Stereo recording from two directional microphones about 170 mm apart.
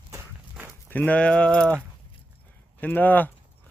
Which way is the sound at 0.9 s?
10° left (ahead or behind).